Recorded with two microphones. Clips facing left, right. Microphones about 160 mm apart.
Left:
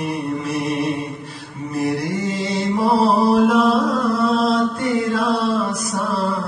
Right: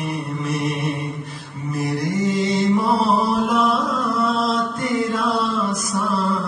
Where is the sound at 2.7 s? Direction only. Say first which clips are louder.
Left 2 dB; 30° left (ahead or behind).